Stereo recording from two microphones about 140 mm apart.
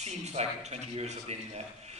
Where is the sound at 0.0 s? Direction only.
50° right (ahead or behind).